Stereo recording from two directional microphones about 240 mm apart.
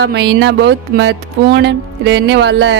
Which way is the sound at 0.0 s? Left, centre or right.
Right.